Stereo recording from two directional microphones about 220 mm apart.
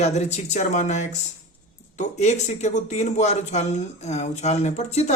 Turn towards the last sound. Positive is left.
turn(degrees=30)  # may be behind; listen again after turning